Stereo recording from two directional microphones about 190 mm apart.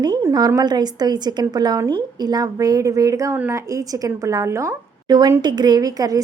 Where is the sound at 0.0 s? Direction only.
20° right (ahead or behind).